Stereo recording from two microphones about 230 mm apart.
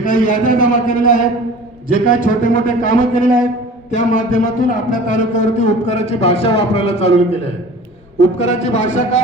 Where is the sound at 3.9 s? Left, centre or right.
Left.